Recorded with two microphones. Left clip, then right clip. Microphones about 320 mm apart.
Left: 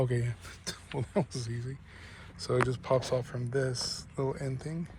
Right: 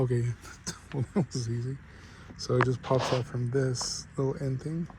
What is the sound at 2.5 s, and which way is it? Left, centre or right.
Speech, centre.